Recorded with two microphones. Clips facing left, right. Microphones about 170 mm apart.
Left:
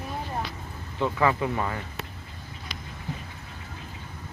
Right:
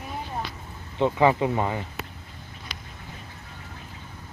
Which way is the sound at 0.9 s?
25° right (ahead or behind).